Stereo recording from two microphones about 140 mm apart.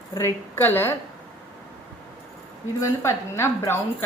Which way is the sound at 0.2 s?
15° left (ahead or behind).